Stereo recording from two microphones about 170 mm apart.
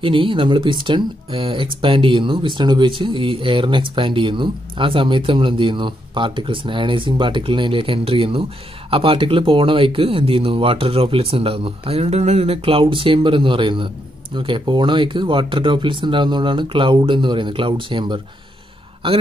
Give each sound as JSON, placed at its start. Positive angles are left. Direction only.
{"t": 0.0, "sound": "speech", "side_deg": -30}